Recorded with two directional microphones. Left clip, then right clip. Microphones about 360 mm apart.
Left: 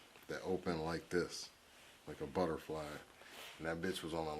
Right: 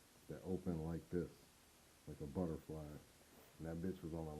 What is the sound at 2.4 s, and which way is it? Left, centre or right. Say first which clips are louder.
Speech: left 8 dB; centre.